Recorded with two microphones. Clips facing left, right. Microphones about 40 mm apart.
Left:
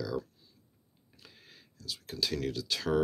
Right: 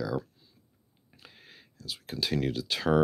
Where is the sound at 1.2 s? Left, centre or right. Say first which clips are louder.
Right 3 dB; right.